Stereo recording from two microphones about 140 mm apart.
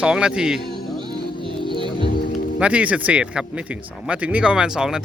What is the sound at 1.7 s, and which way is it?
Music, 35° right (ahead or behind).